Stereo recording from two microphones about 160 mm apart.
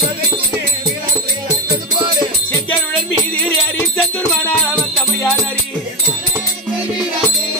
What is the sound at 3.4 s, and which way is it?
Music, 10° left (ahead or behind).